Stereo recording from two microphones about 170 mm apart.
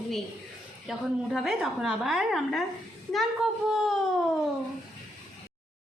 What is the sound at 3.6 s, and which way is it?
Speech, 5° right (ahead or behind).